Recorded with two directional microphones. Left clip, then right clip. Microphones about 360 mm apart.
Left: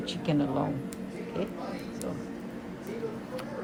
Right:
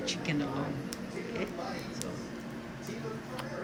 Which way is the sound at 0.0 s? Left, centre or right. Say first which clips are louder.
Left 2 dB; centre.